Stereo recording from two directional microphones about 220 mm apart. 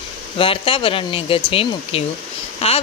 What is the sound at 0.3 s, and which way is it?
Speech, 25° left (ahead or behind).